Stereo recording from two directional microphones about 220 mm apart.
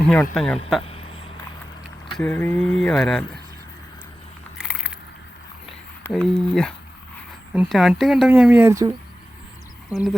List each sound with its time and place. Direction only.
0.3 s speech: 5° left (ahead or behind)
0.8 s a sound: 25° left (ahead or behind)
2.0 s speech: centre (ahead or behind)
4.5 s a sound: 5° right (ahead or behind)
6.0 s speech: centre (ahead or behind)
9.9 s speech: centre (ahead or behind)